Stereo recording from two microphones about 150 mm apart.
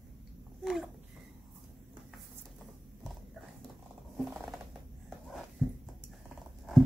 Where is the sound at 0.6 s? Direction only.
Centre (ahead or behind).